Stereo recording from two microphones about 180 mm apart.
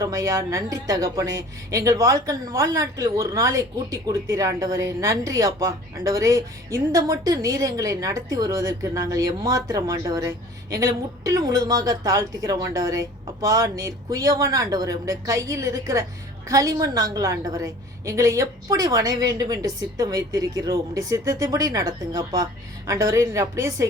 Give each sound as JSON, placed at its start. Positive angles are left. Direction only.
{"t": 0.0, "sound": "a woman's voice", "side_deg": -20}